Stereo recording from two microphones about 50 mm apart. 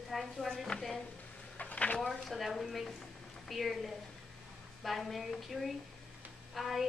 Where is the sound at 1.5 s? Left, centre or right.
Left.